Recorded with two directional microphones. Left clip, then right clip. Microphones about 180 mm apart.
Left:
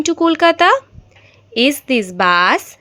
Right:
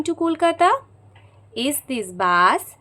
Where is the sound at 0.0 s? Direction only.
20° left (ahead or behind).